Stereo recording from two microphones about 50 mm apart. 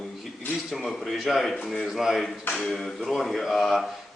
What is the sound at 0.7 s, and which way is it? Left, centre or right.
A man's voice, centre.